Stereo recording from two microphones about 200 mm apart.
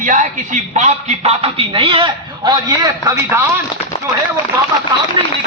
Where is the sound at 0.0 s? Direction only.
40° right (ahead or behind); by 3.4 s 15° right (ahead or behind).